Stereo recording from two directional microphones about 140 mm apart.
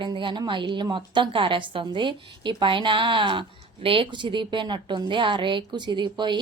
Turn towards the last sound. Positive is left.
turn(degrees=-35)  # may be behind; listen again after turning